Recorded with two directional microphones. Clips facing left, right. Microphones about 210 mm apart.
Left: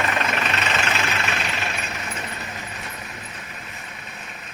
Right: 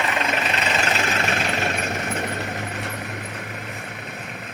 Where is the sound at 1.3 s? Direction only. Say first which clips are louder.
Right 4 dB; 45° right (ahead or behind).